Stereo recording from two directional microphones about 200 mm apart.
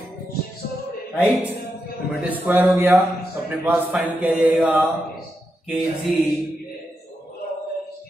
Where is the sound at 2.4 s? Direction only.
10° right (ahead or behind).